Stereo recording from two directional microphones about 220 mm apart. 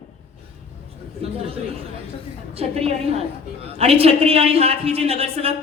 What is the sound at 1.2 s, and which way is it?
Chatter, 25° right (ahead or behind).